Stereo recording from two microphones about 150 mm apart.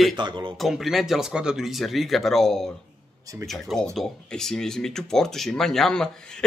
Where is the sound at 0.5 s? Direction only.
Centre (ahead or behind).